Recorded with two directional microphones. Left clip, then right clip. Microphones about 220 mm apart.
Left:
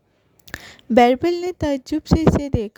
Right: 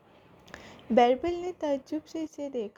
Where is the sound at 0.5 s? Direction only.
55° left (ahead or behind).